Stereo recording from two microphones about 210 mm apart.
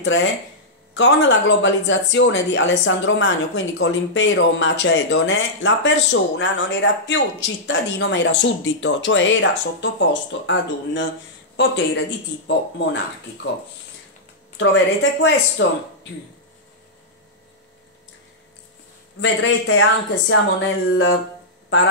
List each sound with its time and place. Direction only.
0.0 s speech: 60° left (ahead or behind)
14.6 s speech: 60° left (ahead or behind)
19.1 s speech: 65° left (ahead or behind)